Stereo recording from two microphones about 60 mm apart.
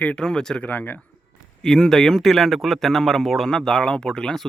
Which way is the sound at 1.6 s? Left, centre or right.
Centre.